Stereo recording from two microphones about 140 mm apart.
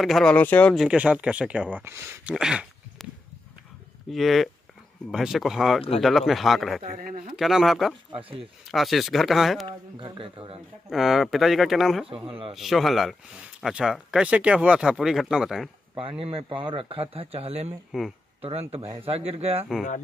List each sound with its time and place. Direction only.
0.0 s speech: 5° left (ahead or behind)
0.7 s speech: 5° right (ahead or behind)
2.3 s a sound: 5° right (ahead or behind)
4.1 s speech: centre (ahead or behind)
6.8 s speech: 80° right
7.3 s speech: centre (ahead or behind)
8.1 s speech: 40° right (ahead or behind)
8.4 s speech: centre (ahead or behind)
9.7 s speech: 35° right (ahead or behind)
10.9 s speech: centre (ahead or behind)
12.3 s speech: 40° right (ahead or behind)
12.5 s speech: centre (ahead or behind)
16.0 s speech: 40° right (ahead or behind)